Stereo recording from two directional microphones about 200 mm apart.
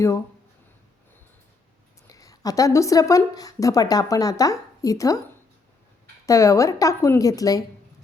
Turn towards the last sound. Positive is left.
turn(degrees=15)  # may be behind; listen again after turning